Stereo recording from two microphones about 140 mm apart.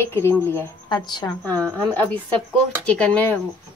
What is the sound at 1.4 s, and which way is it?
Speech, 10° left (ahead or behind).